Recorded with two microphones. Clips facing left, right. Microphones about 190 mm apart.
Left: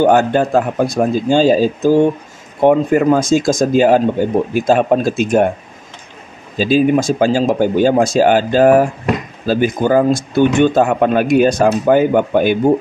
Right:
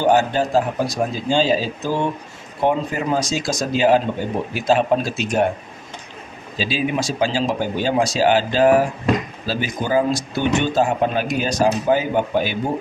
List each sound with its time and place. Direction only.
0.0 s speech: 55° left (ahead or behind)
6.5 s speech: 50° left (ahead or behind)